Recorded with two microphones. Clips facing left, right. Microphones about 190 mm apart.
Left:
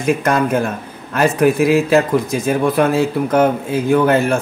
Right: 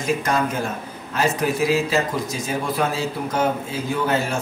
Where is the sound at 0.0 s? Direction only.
55° left (ahead or behind).